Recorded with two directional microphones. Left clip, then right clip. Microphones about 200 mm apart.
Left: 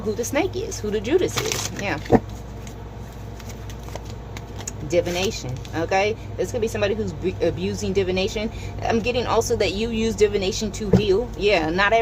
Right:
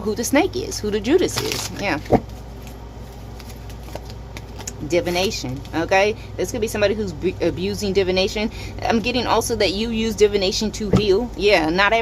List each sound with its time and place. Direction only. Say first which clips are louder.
0.1 s speech: right 4 dB; 30° right (ahead or behind)
1.3 s speech: right 1 dB; 10° right (ahead or behind)
2.1 s speech: even; 10° left (ahead or behind)
4.6 s speech: right 1 dB; 30° right (ahead or behind)